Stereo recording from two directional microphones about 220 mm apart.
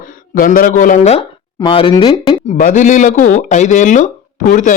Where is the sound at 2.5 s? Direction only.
35° left (ahead or behind).